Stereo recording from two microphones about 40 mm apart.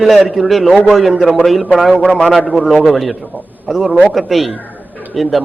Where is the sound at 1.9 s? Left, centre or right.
Left.